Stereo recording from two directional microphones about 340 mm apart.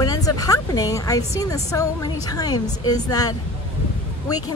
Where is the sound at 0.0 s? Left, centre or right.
Centre.